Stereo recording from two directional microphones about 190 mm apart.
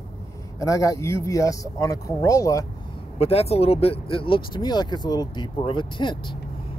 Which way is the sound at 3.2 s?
30° left (ahead or behind).